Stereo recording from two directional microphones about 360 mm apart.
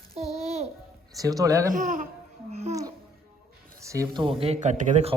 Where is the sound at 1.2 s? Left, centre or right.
Centre.